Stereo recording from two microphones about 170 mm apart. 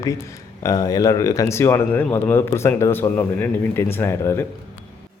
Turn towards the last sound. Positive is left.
turn(degrees=15)  # may be behind; listen again after turning